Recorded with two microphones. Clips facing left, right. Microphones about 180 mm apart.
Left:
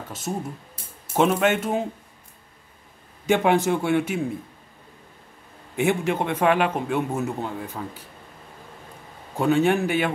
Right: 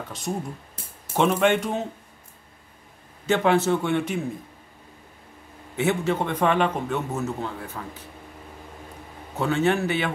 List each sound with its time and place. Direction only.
1.1 s speech: 5° left (ahead or behind)
3.3 s a man's voice: 15° left (ahead or behind)
5.8 s a man's voice: 15° left (ahead or behind)
9.3 s a man's voice: 15° left (ahead or behind)